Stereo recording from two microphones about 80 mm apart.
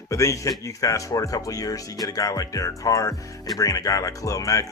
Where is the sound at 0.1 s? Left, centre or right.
Left.